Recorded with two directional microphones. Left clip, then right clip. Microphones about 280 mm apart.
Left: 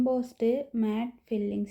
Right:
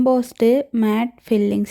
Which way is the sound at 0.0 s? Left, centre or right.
Right.